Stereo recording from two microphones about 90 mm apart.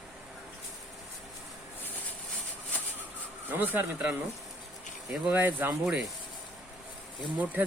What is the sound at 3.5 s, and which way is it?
Speech, 20° right (ahead or behind).